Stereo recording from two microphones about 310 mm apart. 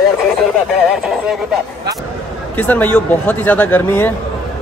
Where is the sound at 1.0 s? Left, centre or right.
Centre.